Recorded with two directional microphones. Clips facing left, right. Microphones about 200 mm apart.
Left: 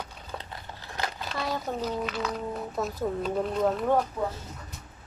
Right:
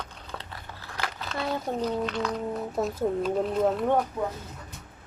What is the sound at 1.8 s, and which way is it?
Speech, 5° left (ahead or behind).